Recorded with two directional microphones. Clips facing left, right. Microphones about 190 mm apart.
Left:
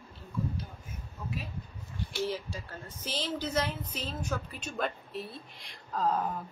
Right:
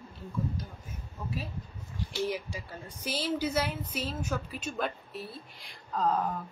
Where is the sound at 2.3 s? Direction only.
10° right (ahead or behind).